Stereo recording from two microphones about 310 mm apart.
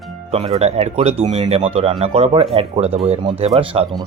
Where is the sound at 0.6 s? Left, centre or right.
Right.